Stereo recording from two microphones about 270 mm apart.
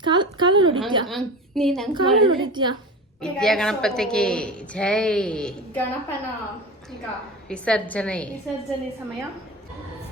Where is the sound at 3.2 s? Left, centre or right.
Centre.